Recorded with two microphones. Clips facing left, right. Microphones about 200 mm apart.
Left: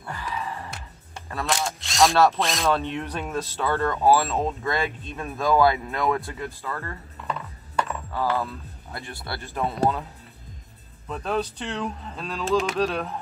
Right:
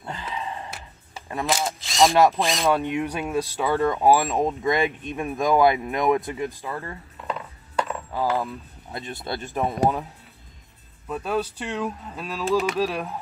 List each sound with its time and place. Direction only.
0.0 s music: 20° right (ahead or behind)
0.7 s music: 5° right (ahead or behind)
1.4 s speech: centre (ahead or behind)
2.7 s speech: 10° right (ahead or behind)
8.1 s speech: 15° right (ahead or behind)
11.1 s speech: 5° right (ahead or behind)